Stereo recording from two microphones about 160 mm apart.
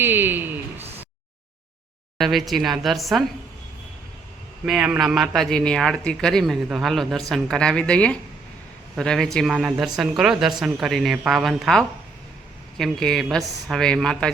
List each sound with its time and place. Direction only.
0.0 s speech: 15° right (ahead or behind)
0.8 s a sound: 40° right (ahead or behind)
2.1 s a man's voice: centre (ahead or behind)
4.6 s a man's voice: 5° right (ahead or behind)